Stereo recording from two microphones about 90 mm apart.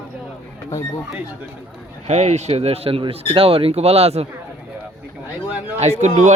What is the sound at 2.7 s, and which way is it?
Speech, 90° right.